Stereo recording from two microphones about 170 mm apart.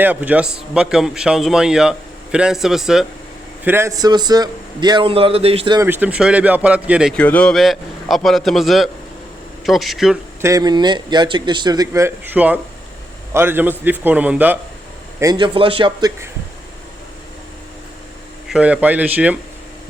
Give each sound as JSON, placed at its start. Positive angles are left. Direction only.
{"t": 0.0, "sound": "a man's voice", "side_deg": -10}
{"t": 3.6, "sound": "speech", "side_deg": -15}
{"t": 5.8, "sound": "a man's voice", "side_deg": -10}
{"t": 7.1, "sound": "a man's voice", "side_deg": 10}
{"t": 10.4, "sound": "a man's voice", "side_deg": -20}
{"t": 15.2, "sound": "speech", "side_deg": -25}
{"t": 18.4, "sound": "a man's voice", "side_deg": -5}